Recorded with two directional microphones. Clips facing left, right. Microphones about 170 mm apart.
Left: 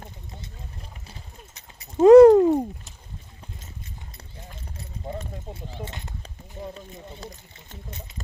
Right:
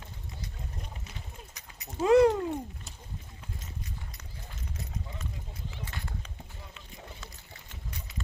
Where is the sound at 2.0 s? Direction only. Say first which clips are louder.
Left 12 dB; 45° left (ahead or behind).